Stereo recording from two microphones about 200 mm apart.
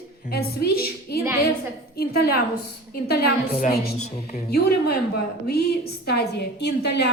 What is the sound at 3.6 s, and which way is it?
A woman's voice, 50° left (ahead or behind).